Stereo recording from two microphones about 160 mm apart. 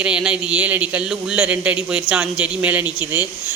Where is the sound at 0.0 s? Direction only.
5° right (ahead or behind).